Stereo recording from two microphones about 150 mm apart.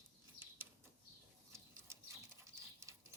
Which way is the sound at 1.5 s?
20° right (ahead or behind).